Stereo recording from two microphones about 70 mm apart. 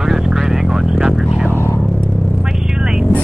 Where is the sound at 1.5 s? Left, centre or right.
Left.